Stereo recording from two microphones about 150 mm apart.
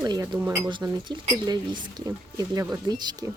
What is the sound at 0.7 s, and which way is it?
Speech, 30° right (ahead or behind).